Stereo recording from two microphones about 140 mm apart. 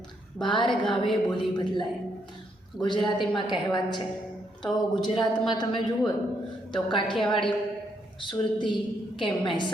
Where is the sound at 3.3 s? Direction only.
30° left (ahead or behind).